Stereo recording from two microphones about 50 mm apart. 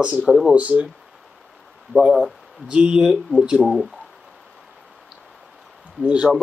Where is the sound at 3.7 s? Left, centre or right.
Centre.